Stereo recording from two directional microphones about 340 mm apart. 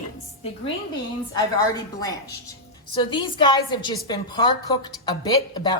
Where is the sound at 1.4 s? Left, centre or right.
Centre.